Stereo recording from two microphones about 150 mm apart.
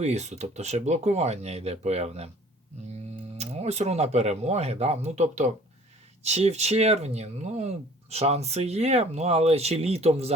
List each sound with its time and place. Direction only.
0.0 s speech: 50° right (ahead or behind)
3.3 s speech: 45° right (ahead or behind)